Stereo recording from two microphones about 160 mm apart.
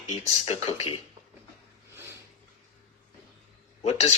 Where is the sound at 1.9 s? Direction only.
15° right (ahead or behind).